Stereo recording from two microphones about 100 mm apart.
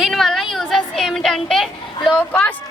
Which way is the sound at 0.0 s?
Centre (ahead or behind).